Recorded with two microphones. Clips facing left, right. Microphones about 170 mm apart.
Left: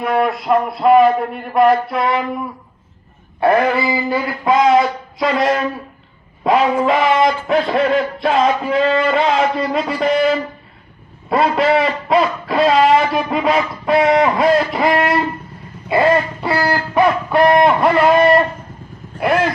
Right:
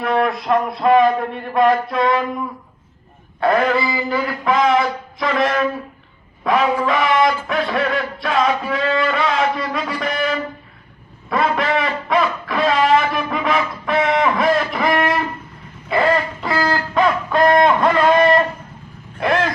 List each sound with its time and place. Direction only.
0.0 s a man's voice: 5° left (ahead or behind)
3.4 s a man's voice: 15° left (ahead or behind); by 10.3 s 35° left (ahead or behind)
11.3 s a sound: 30° left (ahead or behind); by 19.5 s 5° left (ahead or behind)